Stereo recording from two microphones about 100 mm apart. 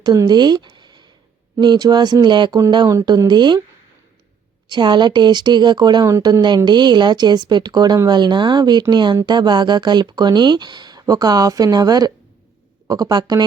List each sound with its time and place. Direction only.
0.0 s speech: 40° right (ahead or behind)
4.7 s speech: 50° right (ahead or behind)